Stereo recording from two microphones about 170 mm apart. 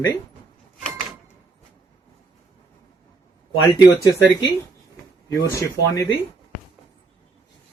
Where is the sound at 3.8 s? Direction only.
20° left (ahead or behind).